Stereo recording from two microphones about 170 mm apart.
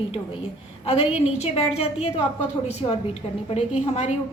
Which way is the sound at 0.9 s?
35° left (ahead or behind).